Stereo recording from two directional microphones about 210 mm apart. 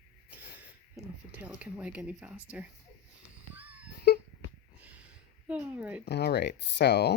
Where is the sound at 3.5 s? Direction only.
10° right (ahead or behind).